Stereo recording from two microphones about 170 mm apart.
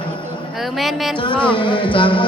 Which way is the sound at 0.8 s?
Centre (ahead or behind).